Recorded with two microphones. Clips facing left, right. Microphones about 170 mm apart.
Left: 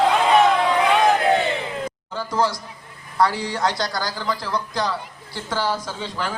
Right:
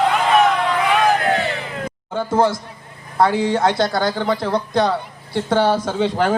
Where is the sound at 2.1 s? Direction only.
55° right (ahead or behind).